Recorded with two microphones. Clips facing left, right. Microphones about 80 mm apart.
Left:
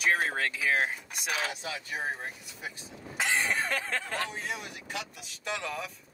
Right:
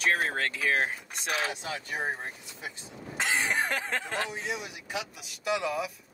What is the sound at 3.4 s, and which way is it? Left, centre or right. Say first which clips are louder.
Speech: right 1 dB; centre.